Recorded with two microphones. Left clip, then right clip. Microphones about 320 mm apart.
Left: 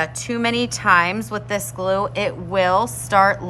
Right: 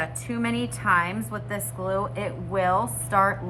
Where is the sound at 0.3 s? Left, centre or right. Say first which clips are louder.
Left 8 dB; centre.